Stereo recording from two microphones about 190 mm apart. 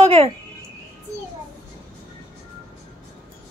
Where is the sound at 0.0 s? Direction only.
30° right (ahead or behind).